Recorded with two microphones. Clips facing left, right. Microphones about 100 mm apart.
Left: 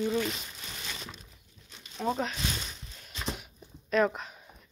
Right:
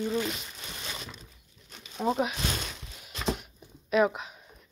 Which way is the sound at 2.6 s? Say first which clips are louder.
Right 4 dB; 60° right (ahead or behind).